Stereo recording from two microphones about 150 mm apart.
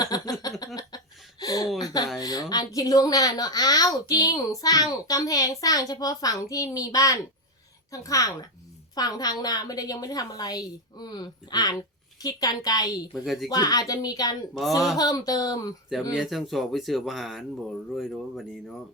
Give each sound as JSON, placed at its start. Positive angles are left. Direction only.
{"t": 0.0, "sound": "a sound", "side_deg": 25}
{"t": 2.1, "sound": "a woman's voice", "side_deg": 25}
{"t": 13.1, "sound": "speech", "side_deg": 0}
{"t": 13.5, "sound": "a woman's voice", "side_deg": 25}
{"t": 16.1, "sound": "speech", "side_deg": 0}